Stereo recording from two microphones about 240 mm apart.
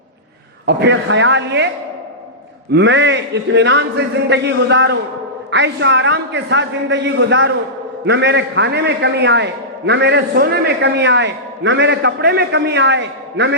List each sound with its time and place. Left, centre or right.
0.6 s a man's voice: right
2.7 s a man's voice: right